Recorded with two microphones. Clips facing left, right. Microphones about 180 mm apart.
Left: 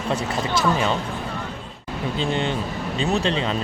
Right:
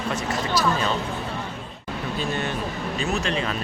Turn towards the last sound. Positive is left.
turn(degrees=25)  # may be behind; listen again after turning